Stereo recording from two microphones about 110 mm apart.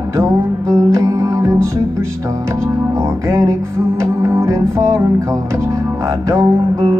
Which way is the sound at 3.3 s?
30° right (ahead or behind).